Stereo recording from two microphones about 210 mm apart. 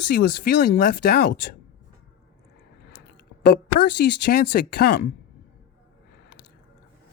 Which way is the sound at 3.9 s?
50° left (ahead or behind).